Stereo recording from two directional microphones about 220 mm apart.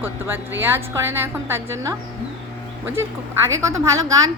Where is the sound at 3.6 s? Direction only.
15° right (ahead or behind).